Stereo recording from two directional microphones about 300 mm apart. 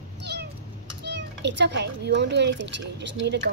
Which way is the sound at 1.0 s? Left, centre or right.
Right.